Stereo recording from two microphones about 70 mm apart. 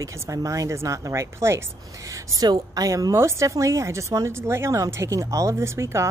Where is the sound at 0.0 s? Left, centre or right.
Right.